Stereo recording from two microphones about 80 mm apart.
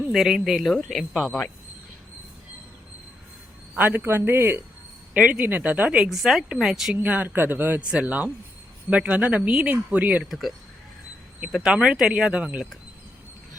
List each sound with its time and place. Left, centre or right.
0.1 s speech: centre
3.8 s a man's voice: right
5.1 s speech: centre
6.9 s a man's voice: centre
10.2 s speech: centre